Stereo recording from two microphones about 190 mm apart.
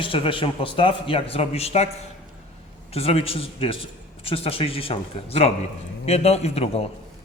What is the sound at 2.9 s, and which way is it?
A man's voice, 30° left (ahead or behind).